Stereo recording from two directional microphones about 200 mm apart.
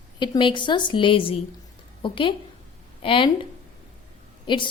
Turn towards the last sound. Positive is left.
turn(degrees=25)  # may be behind; listen again after turning